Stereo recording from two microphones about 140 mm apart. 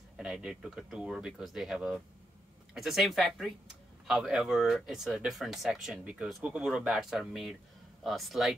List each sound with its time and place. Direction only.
0.2 s speech: 5° right (ahead or behind)